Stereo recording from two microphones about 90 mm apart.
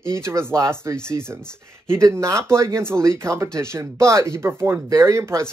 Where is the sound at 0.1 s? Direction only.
30° right (ahead or behind).